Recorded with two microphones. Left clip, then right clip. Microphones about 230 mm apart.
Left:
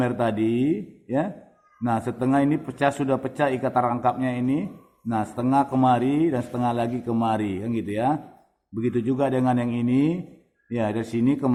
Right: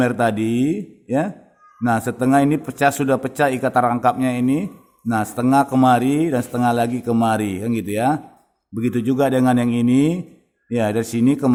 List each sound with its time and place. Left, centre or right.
0.0 s a man's voice: right